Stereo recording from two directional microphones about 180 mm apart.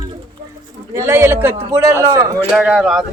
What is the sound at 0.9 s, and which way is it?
A man's voice, 15° right (ahead or behind).